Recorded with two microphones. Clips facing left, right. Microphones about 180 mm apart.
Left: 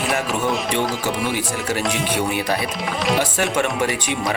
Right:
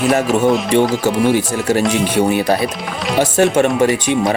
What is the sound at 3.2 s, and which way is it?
Speech, 40° right (ahead or behind).